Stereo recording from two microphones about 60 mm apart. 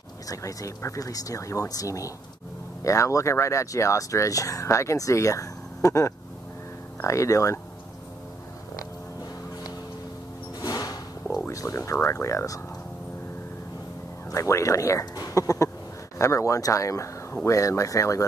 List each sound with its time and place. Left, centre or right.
0.3 s speech: left
10.6 s a sound: left
11.4 s a sound: left
12.1 s speech: left
14.3 s speech: left
16.2 s speech: left